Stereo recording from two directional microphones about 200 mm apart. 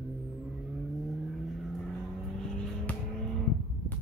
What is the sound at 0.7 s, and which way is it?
Vehicle, centre (ahead or behind).